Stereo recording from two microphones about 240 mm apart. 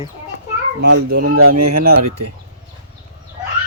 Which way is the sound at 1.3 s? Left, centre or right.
Right.